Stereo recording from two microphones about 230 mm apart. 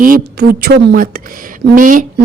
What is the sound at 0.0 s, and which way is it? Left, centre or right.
A woman's voice, right.